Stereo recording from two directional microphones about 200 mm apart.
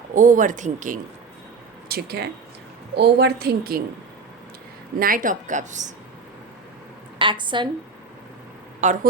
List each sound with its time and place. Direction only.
0.1 s speech: 40° right (ahead or behind)
1.9 s a woman's voice: 50° right (ahead or behind)
4.9 s speech: 45° right (ahead or behind)
7.2 s a woman's voice: 25° right (ahead or behind)
8.8 s speech: 35° right (ahead or behind)